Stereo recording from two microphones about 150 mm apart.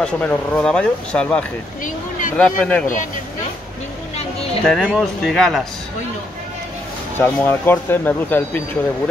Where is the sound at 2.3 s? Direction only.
5° left (ahead or behind).